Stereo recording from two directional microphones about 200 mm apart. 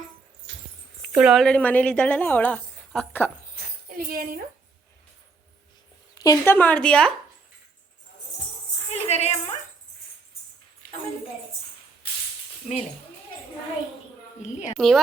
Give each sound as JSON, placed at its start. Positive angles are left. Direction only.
{"t": 1.1, "sound": "a woman's voice", "side_deg": -5}
{"t": 3.9, "sound": "speech", "side_deg": -45}
{"t": 6.1, "sound": "a woman's voice", "side_deg": 15}
{"t": 8.9, "sound": "tambourine", "side_deg": 35}
{"t": 14.8, "sound": "a woman's voice", "side_deg": 0}